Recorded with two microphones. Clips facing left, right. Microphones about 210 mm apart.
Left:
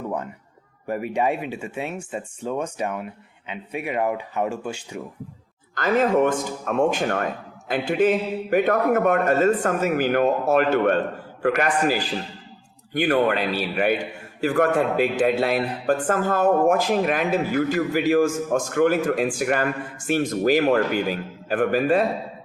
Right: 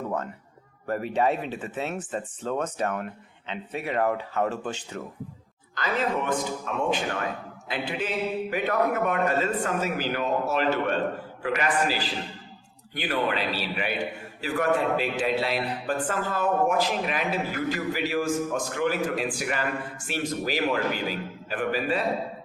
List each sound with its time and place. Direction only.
0.9 s speech: 15° left (ahead or behind)
5.7 s a man's voice: 50° left (ahead or behind)